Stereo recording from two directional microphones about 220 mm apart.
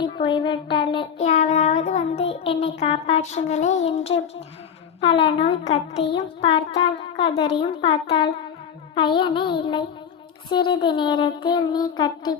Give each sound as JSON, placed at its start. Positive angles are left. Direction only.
{"t": 0.0, "sound": "child singing", "side_deg": 20}